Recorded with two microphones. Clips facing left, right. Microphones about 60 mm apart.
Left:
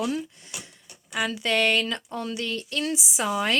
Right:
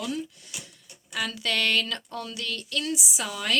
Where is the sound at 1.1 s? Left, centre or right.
Left.